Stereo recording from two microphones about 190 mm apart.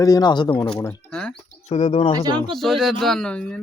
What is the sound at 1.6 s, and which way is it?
Speech, 35° left (ahead or behind).